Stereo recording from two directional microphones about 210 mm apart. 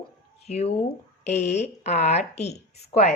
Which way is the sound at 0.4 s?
30° left (ahead or behind).